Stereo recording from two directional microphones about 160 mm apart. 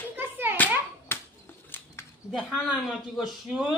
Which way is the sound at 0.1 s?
10° right (ahead or behind).